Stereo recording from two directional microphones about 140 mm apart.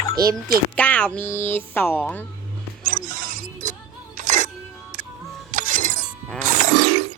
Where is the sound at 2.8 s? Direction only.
70° right (ahead or behind).